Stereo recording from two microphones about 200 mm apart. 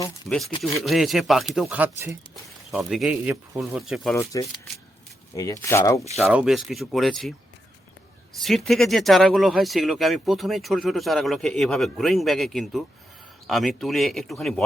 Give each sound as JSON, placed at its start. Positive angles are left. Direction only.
{"t": 0.3, "sound": "speech", "side_deg": 0}
{"t": 4.1, "sound": "speech", "side_deg": 15}
{"t": 6.1, "sound": "speech", "side_deg": -5}